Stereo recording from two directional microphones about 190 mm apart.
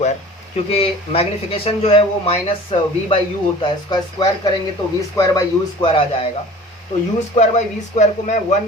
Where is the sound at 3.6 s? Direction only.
20° left (ahead or behind).